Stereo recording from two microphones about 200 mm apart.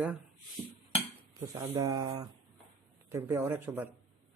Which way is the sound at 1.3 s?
15° right (ahead or behind).